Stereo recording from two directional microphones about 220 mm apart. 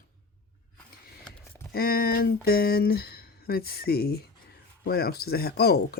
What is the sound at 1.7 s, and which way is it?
Speech, 45° left (ahead or behind).